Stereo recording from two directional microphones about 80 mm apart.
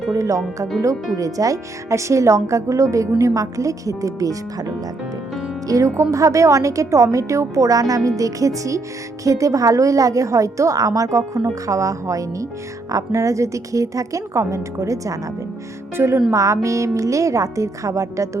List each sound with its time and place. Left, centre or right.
0.1 s a woman's voice: right
16.0 s a woman's voice: right